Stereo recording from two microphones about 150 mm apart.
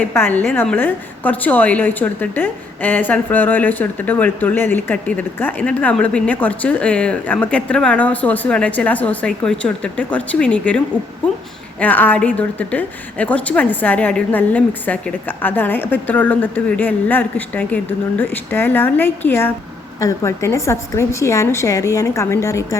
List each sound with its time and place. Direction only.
0.0 s a woman's voice: 15° left (ahead or behind)
11.8 s a woman's voice: 10° left (ahead or behind)